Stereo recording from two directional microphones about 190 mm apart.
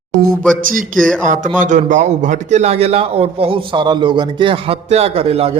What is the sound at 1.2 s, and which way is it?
A man's voice, 45° right (ahead or behind).